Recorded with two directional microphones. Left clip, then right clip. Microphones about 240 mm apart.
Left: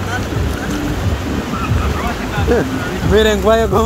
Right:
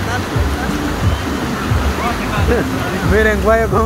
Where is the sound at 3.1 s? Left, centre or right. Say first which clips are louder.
Left 1 dB; left.